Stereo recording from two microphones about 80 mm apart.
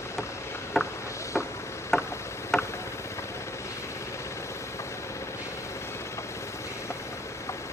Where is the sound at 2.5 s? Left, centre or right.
Centre.